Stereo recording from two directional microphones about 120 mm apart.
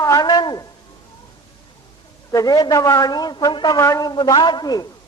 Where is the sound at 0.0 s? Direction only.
30° left (ahead or behind).